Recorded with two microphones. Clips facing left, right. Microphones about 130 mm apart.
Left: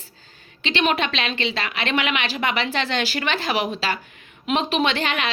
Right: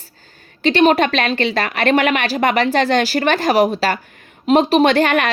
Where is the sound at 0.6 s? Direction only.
45° right (ahead or behind).